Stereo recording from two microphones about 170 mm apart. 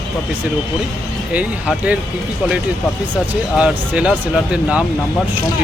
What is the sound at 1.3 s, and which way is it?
Speech, 10° right (ahead or behind).